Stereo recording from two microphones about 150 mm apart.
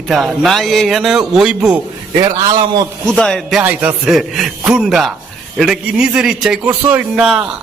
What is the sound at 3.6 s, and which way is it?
A man's voice, 10° right (ahead or behind).